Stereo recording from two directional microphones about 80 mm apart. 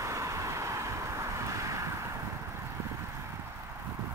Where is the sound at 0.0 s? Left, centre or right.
Right.